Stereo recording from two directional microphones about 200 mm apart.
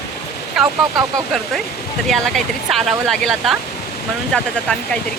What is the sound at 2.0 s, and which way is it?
Speech, 5° left (ahead or behind).